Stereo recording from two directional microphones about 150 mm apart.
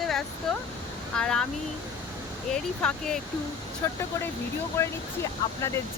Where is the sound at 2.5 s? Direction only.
5° left (ahead or behind).